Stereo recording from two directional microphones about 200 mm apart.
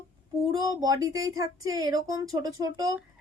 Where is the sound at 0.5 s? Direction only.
20° right (ahead or behind).